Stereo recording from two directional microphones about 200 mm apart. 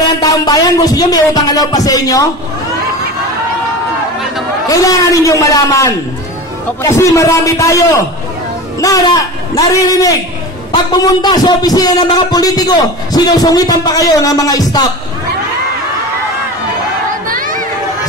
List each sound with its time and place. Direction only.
0.2 s a man's voice: 15° left (ahead or behind)
4.6 s a man's voice: 15° left (ahead or behind)
8.8 s a man's voice: 20° left (ahead or behind)
17.3 s a sound: 45° right (ahead or behind)